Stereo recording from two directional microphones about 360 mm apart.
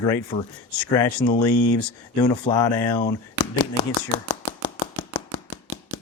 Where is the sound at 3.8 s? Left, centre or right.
Centre.